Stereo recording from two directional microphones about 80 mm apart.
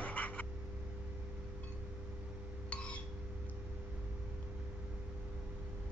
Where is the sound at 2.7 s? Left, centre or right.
Centre.